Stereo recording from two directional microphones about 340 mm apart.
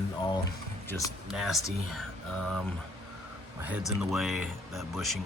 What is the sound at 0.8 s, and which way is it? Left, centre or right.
Speech, centre.